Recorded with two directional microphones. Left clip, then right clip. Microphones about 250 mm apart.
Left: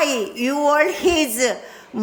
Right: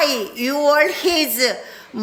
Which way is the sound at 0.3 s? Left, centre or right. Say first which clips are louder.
Right 2 dB; centre.